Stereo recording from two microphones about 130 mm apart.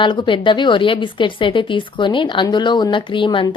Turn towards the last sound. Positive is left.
turn(degrees=40)  # may be behind; listen again after turning